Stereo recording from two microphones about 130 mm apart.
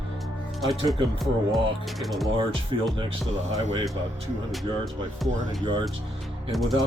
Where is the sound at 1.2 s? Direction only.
Centre (ahead or behind).